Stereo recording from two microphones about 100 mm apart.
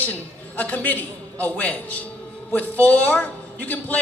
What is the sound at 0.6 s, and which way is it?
A man's voice, 15° left (ahead or behind).